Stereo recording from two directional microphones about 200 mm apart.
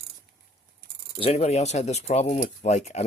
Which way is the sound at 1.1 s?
30° left (ahead or behind).